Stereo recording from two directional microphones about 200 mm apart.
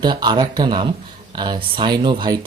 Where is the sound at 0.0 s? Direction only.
20° right (ahead or behind).